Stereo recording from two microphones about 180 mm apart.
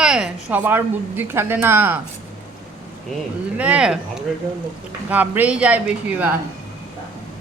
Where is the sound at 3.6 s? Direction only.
5° right (ahead or behind).